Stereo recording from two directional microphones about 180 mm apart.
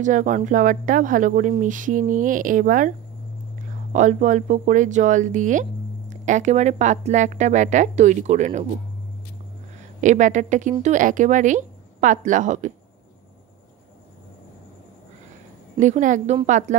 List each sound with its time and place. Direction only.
0.0 s speech: 45° right (ahead or behind)
3.9 s speech: 45° right (ahead or behind)
9.9 s speech: 45° right (ahead or behind)
15.8 s speech: 45° right (ahead or behind)